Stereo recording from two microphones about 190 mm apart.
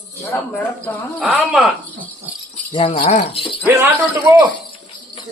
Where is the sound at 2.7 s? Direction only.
25° left (ahead or behind).